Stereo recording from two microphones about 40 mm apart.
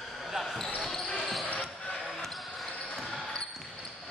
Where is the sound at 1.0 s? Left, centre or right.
Left.